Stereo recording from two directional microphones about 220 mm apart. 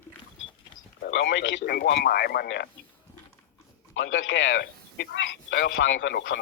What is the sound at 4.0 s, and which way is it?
Speech, 60° left (ahead or behind).